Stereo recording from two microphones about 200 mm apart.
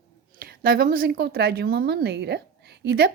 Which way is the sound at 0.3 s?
45° right (ahead or behind).